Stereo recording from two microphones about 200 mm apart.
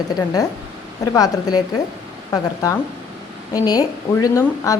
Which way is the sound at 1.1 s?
20° left (ahead or behind).